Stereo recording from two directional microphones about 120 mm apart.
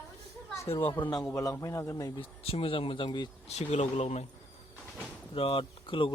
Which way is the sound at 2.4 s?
50° left (ahead or behind).